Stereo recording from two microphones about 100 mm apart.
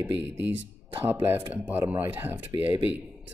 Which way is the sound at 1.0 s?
20° right (ahead or behind).